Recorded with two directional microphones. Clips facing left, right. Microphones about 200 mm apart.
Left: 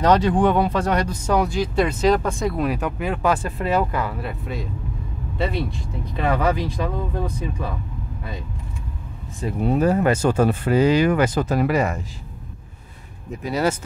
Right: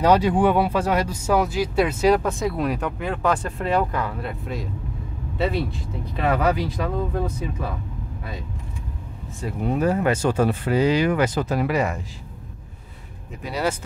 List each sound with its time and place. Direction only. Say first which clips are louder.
0.0 s speech: even; 10° right (ahead or behind)
9.7 s speech: left 2 dB; 35° left (ahead or behind)
13.5 s speech: left 3 dB; 45° left (ahead or behind)